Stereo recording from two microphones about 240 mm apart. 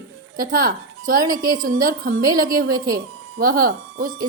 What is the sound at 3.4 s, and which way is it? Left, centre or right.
Speech, right.